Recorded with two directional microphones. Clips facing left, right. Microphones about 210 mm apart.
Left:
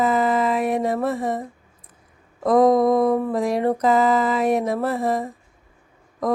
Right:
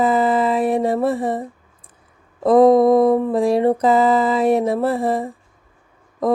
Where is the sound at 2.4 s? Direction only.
30° right (ahead or behind).